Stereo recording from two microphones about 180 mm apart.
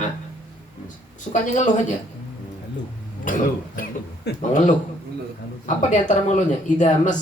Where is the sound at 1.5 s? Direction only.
45° left (ahead or behind).